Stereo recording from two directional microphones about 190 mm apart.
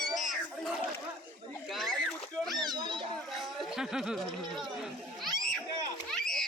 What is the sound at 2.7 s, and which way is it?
Music, 25° right (ahead or behind).